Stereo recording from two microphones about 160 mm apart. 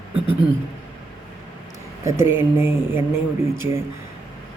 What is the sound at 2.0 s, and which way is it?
Speech, 15° right (ahead or behind).